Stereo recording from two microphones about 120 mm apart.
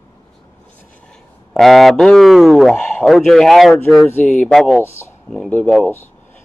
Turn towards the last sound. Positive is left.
turn(degrees=15)  # may be behind; listen again after turning